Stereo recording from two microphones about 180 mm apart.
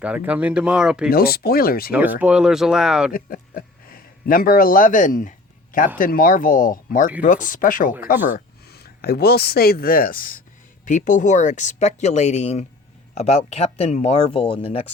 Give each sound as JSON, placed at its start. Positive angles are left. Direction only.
{"t": 0.0, "sound": "speech", "side_deg": -5}
{"t": 1.1, "sound": "speech", "side_deg": 55}
{"t": 1.9, "sound": "speech", "side_deg": -10}
{"t": 3.1, "sound": "speech", "side_deg": 55}